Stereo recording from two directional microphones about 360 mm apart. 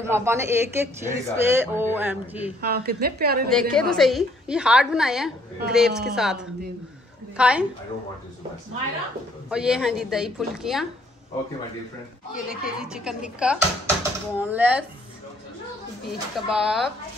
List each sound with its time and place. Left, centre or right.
0.0 s speech: centre
2.6 s a woman's voice: right
3.4 s speech: centre
9.5 s speech: centre
12.4 s speech: centre
16.3 s speech: centre